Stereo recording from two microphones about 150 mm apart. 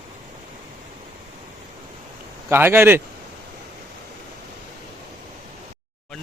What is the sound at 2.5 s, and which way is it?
Speech, 15° right (ahead or behind).